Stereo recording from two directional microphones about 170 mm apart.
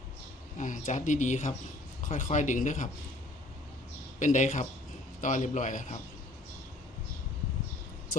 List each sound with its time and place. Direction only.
0.6 s speech: 50° left (ahead or behind)
4.2 s speech: 45° left (ahead or behind)